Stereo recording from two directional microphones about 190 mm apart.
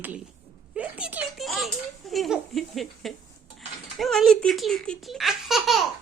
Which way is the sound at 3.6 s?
Centre (ahead or behind).